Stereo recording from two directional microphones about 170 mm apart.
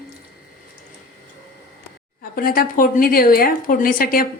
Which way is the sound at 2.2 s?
55° left (ahead or behind).